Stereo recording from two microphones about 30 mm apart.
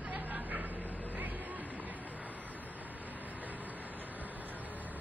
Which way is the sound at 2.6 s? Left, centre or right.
Right.